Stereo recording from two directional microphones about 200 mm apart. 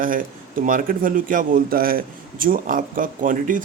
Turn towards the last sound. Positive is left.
turn(degrees=-40)  # may be behind; listen again after turning